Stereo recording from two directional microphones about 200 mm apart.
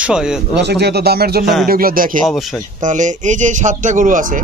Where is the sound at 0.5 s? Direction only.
55° right (ahead or behind).